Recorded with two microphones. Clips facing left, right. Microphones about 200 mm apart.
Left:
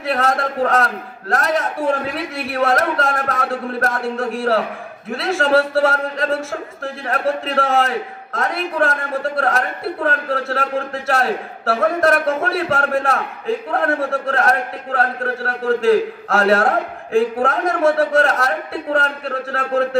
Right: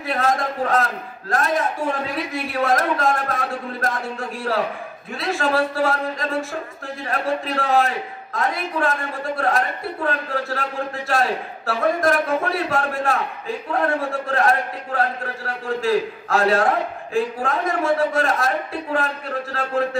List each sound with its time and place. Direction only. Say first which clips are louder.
0.0 s a man's voice: left 2 dB; 70° left (ahead or behind)
10.0 s a man's voice: left 3 dB; 65° left (ahead or behind)